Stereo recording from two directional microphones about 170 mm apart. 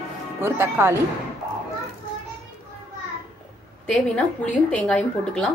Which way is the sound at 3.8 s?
5° left (ahead or behind).